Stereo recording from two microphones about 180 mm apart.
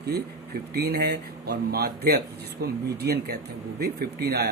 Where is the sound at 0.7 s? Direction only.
65° right (ahead or behind).